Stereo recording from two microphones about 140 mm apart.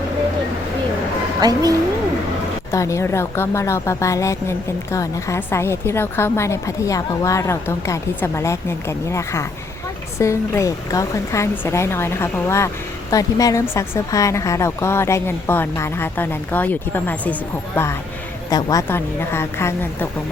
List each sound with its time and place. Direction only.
1.4 s a woman's voice: 25° right (ahead or behind)
2.7 s a woman's voice: 20° left (ahead or behind)